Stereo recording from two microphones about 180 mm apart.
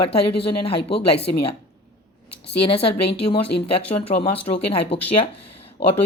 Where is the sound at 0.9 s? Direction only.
65° left (ahead or behind).